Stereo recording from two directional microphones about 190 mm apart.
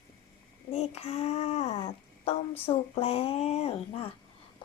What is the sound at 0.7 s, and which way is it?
A woman's voice, 35° left (ahead or behind).